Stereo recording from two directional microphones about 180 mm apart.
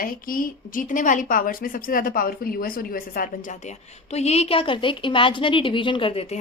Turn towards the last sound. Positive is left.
turn(degrees=35)  # may be behind; listen again after turning